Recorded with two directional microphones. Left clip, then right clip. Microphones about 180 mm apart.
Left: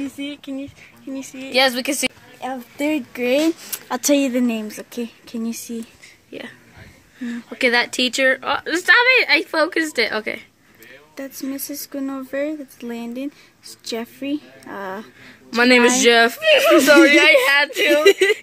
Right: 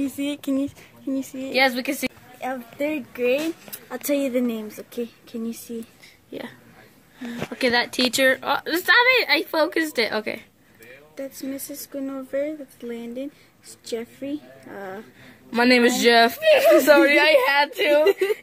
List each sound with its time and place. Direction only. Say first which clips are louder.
0.2 s speech: right 4 dB; 55° right (ahead or behind)
1.1 s speech: right 2 dB; 25° right (ahead or behind)
1.5 s a woman's voice: left 3 dB; 15° left (ahead or behind)
2.8 s speech: left 3 dB; 50° left (ahead or behind)
3.9 s a woman's voice: left 5 dB; 40° left (ahead or behind)
7.5 s speech: left 4 dB; centre (ahead or behind)
11.5 s a woman's voice: left 4 dB; 30° left (ahead or behind)
15.5 s speech: left 4 dB; 5° right (ahead or behind)